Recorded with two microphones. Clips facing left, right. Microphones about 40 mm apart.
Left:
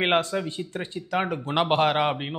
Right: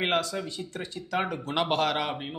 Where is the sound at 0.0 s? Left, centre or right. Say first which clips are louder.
Left 4 dB; left.